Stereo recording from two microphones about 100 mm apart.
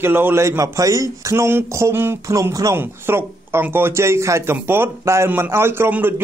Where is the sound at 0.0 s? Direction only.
20° right (ahead or behind).